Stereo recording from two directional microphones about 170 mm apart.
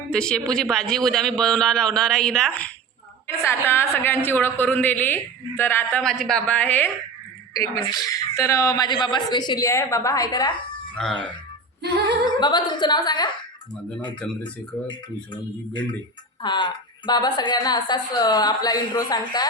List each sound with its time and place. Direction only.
0.1 s a man's voice: 5° left (ahead or behind); by 10.5 s 20° left (ahead or behind)
11.0 s a man's voice: 5° left (ahead or behind)
12.2 s a woman's voice: 25° left (ahead or behind)
14.2 s a woman's voice: 5° left (ahead or behind)
16.4 s a woman's voice: 25° left (ahead or behind)